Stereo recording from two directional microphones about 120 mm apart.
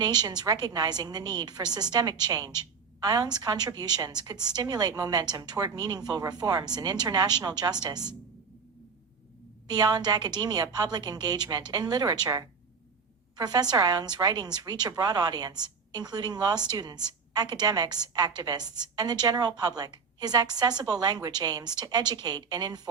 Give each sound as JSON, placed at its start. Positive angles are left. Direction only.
{"t": 0.0, "sound": "a woman's voice", "side_deg": -35}
{"t": 9.6, "sound": "a woman's voice", "side_deg": -35}